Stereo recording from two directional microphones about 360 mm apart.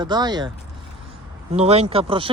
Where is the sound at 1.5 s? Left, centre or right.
Centre.